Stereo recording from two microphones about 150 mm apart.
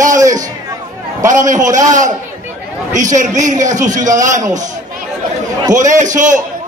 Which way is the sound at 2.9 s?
55° right (ahead or behind).